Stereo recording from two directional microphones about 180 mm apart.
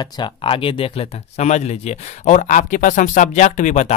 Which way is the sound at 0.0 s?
25° left (ahead or behind).